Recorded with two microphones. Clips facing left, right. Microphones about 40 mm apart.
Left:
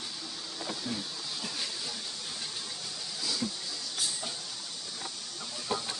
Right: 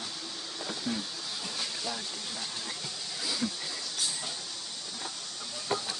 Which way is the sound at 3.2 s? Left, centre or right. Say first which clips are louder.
Even; centre.